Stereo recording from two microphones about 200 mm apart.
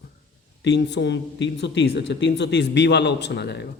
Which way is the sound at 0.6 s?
60° left (ahead or behind).